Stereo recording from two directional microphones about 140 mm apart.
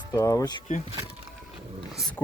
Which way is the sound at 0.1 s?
25° left (ahead or behind).